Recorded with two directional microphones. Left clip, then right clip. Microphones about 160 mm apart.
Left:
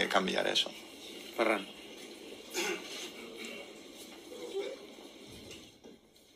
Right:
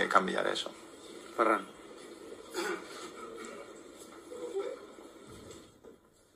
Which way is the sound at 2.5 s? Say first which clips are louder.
Left 1 dB; 35° right (ahead or behind).